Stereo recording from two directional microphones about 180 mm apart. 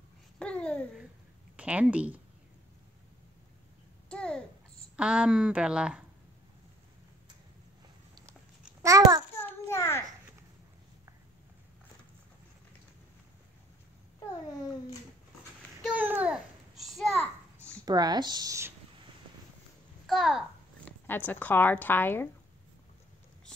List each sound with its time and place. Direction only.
0.4 s babbling: 5° left (ahead or behind)
1.6 s speech: 5° right (ahead or behind)
4.1 s babbling: 5° left (ahead or behind)
4.9 s speech: 5° right (ahead or behind)
8.8 s a child's voice: 20° right (ahead or behind)
9.4 s a sound: 15° left (ahead or behind)
15.8 s babbling: 10° right (ahead or behind)
17.8 s speech: 20° right (ahead or behind)
20.1 s a sound: centre (ahead or behind)
21.1 s a woman's voice: 10° left (ahead or behind)